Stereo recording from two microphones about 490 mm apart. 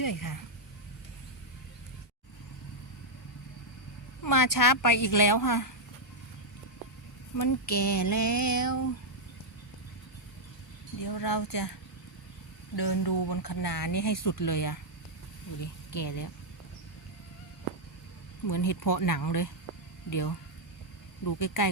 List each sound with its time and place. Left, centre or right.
0.0 s speech: left
4.2 s a woman's voice: left
7.3 s a woman's voice: left
11.0 s speech: left
12.7 s speech: left
16.0 s a woman's voice: left
18.4 s a woman's voice: left